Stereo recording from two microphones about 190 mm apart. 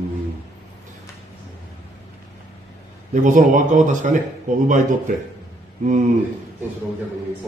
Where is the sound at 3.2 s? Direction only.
40° right (ahead or behind).